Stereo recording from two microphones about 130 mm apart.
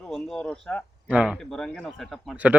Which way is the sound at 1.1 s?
10° right (ahead or behind).